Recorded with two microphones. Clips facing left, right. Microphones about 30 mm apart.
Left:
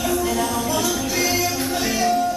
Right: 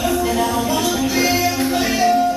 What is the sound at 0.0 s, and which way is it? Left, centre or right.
Music, centre.